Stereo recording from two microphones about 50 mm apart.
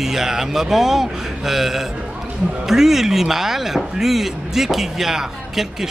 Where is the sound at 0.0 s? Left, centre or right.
Centre.